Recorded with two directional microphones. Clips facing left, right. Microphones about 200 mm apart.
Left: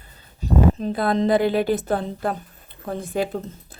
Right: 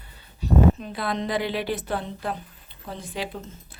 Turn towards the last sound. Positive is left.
turn(degrees=50)  # may be behind; listen again after turning